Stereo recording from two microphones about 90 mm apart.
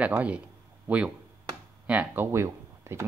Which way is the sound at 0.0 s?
15° right (ahead or behind).